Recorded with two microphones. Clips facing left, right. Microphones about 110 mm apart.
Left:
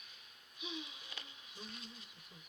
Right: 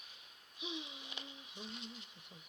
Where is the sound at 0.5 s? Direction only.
25° right (ahead or behind).